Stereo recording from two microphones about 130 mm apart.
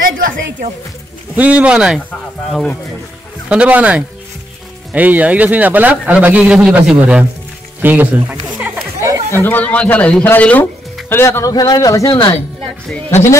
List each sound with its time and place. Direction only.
0.2 s a woman's voice: 90° right
1.3 s a man's voice: 10° right (ahead or behind)
3.4 s a man's voice: 10° right (ahead or behind)
9.3 s speech: 15° left (ahead or behind)